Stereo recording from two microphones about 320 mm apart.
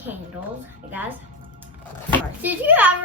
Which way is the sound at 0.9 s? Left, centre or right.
Centre.